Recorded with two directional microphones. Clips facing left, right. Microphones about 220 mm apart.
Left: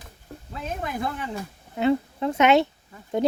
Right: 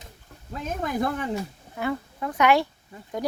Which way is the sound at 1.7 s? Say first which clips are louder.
Left 7 dB; 25° left (ahead or behind).